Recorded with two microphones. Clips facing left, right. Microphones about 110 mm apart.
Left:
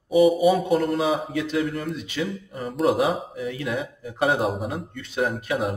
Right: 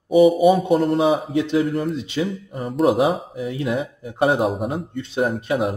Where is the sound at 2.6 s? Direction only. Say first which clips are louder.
Right 4 dB; centre (ahead or behind).